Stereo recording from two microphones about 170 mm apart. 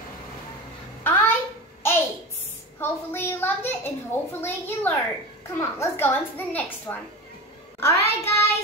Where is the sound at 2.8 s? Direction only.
10° left (ahead or behind).